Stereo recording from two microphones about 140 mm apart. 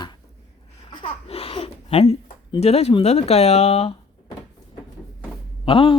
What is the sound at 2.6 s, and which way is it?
Speech, 50° left (ahead or behind).